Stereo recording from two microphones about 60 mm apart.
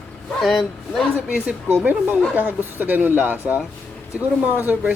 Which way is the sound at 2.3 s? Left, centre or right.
Right.